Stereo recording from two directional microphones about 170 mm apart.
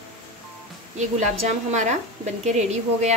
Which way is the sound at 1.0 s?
45° right (ahead or behind).